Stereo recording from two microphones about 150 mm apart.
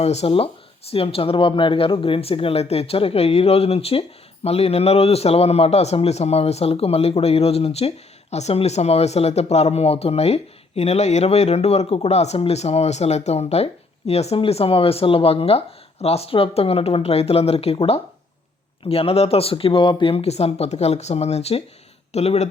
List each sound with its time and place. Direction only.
0.0 s a man's voice: 45° left (ahead or behind)